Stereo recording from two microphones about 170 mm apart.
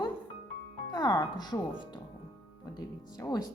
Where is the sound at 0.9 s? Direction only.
25° left (ahead or behind).